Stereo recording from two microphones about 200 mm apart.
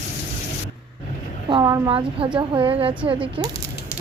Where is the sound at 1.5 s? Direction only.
20° right (ahead or behind).